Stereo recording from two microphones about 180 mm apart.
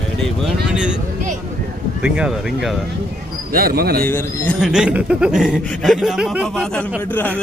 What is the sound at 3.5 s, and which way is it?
Speech, 55° right (ahead or behind).